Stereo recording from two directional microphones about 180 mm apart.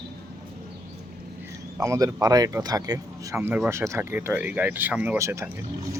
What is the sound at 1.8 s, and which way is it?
Speech, 15° right (ahead or behind).